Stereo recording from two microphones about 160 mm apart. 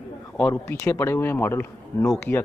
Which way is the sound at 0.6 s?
15° left (ahead or behind).